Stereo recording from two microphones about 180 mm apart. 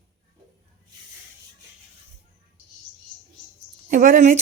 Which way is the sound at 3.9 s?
50° right (ahead or behind).